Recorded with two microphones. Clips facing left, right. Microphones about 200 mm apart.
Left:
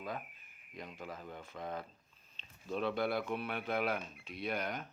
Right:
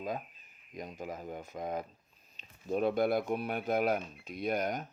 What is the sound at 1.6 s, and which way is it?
Speech, 20° right (ahead or behind).